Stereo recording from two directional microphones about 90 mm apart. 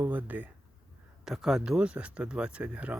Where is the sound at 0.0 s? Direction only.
20° right (ahead or behind).